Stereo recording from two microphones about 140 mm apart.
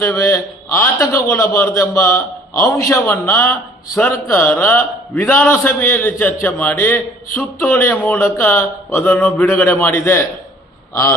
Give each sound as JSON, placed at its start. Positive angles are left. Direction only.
{"t": 0.0, "sound": "a man's voice", "side_deg": 20}